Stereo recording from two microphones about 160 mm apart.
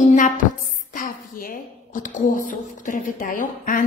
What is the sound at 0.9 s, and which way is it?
A woman's voice, 65° left (ahead or behind).